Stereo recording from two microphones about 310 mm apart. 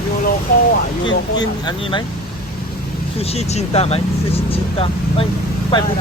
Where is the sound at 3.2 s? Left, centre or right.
Centre.